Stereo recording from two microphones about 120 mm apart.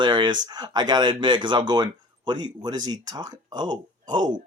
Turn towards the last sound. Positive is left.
turn(degrees=-40)  # may be behind; listen again after turning